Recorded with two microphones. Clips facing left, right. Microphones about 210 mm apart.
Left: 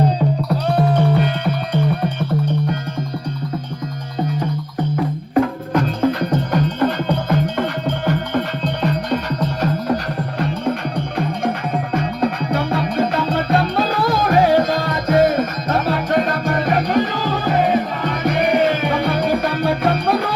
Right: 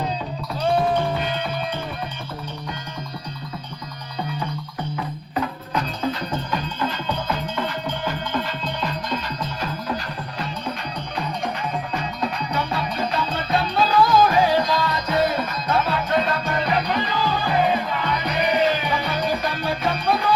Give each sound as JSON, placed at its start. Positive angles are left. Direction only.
{"t": 1.2, "sound": "music", "side_deg": 65}
{"t": 4.2, "sound": "music", "side_deg": 45}
{"t": 11.9, "sound": "music", "side_deg": 55}